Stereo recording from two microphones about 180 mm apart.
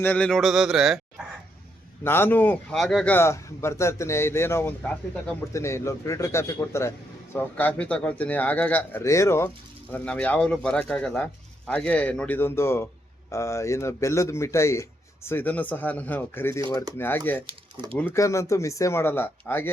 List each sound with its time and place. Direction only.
0.0 s speech: 10° left (ahead or behind)
2.0 s a man's voice: 10° left (ahead or behind)